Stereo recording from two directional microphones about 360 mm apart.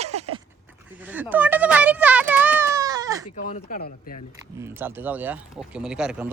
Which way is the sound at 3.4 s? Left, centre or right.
Left.